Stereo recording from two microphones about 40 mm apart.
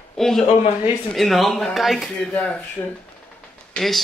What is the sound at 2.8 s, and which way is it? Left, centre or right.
Speech, left.